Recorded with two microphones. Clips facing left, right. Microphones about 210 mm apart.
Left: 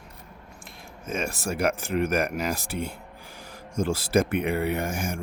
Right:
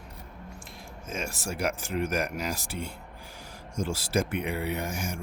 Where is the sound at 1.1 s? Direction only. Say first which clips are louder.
Left 5 dB; 60° left (ahead or behind).